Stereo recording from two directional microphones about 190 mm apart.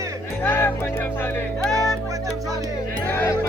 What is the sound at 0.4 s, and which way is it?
Music, 10° left (ahead or behind).